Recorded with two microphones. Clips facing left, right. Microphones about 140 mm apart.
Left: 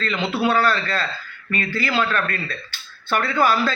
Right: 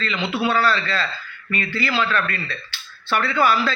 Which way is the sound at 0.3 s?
40° left (ahead or behind).